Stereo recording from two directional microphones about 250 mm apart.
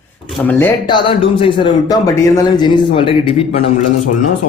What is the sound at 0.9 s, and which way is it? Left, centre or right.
Speech, left.